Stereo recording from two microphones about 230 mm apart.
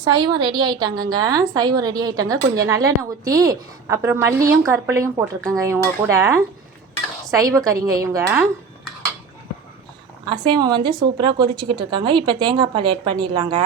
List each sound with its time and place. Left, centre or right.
0.0 s a woman's voice: centre
10.2 s a woman's voice: centre